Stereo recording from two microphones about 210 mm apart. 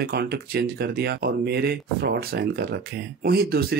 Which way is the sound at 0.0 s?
50° right (ahead or behind).